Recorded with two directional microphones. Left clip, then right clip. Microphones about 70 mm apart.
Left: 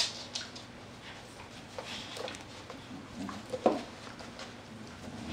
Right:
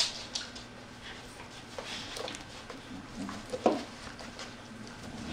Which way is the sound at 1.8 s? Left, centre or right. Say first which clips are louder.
Right 2 dB; centre.